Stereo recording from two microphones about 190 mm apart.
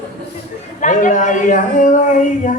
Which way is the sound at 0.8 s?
45° left (ahead or behind).